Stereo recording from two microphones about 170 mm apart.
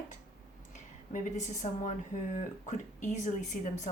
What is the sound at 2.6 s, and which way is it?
Speech, 45° left (ahead or behind).